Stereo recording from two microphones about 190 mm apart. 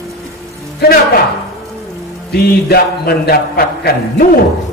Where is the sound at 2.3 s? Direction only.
55° left (ahead or behind).